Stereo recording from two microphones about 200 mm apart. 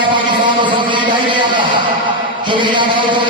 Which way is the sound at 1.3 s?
25° right (ahead or behind).